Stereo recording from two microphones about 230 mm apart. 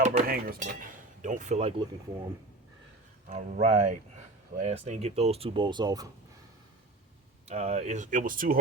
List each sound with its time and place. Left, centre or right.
0.0 s speech: right
3.2 s speech: right
7.4 s speech: right